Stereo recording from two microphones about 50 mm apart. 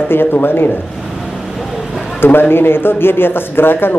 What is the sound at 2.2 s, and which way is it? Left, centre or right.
Speech, left.